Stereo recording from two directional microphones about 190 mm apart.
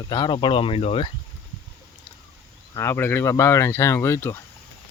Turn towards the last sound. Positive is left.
turn(degrees=15)  # may be behind; listen again after turning